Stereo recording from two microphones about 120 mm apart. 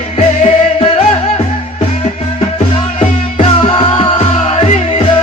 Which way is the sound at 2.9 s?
50° left (ahead or behind).